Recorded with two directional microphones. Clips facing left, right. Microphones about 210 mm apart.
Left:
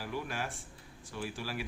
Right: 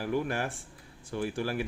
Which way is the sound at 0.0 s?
55° right (ahead or behind).